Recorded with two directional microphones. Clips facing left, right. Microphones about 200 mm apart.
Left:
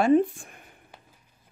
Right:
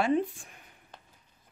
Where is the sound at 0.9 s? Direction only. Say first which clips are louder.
Right 1 dB; 10° left (ahead or behind).